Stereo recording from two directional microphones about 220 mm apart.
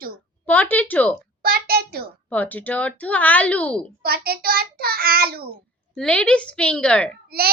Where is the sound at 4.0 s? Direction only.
45° right (ahead or behind).